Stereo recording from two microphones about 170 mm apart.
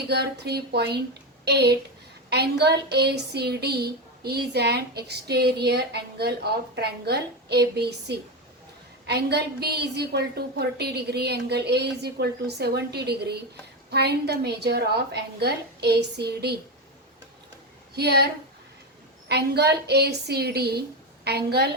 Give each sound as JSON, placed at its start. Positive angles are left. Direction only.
{"t": 0.1, "sound": "a woman's voice", "side_deg": -75}
{"t": 17.9, "sound": "a woman's voice", "side_deg": -75}
{"t": 19.3, "sound": "a woman's voice", "side_deg": -75}